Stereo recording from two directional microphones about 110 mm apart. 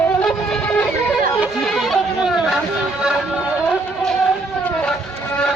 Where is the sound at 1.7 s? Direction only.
Centre (ahead or behind).